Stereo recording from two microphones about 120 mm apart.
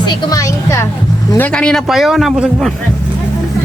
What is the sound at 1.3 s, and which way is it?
Speech, 10° left (ahead or behind).